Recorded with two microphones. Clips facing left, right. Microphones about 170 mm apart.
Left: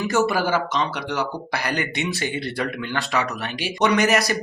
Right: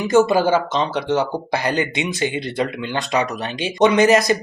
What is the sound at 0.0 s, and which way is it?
Speech, 20° right (ahead or behind).